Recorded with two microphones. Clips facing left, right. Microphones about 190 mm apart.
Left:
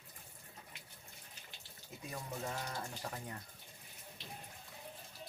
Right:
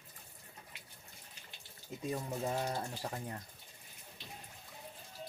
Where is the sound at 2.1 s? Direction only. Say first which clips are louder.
Right 6 dB; 30° right (ahead or behind).